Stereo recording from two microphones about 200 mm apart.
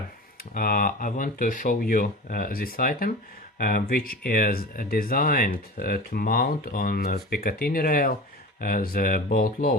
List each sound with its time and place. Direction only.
0.5 s speech: 45° left (ahead or behind)